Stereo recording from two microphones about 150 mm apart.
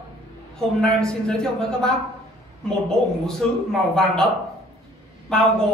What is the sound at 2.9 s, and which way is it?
A man's voice, 5° left (ahead or behind).